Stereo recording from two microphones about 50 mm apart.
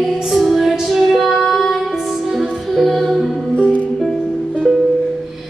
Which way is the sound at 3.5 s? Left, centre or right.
Left.